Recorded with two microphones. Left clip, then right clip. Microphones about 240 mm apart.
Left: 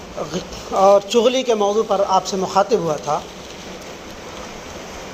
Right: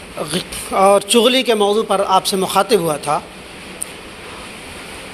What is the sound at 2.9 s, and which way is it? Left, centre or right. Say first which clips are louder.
Speech: right 2 dB; right.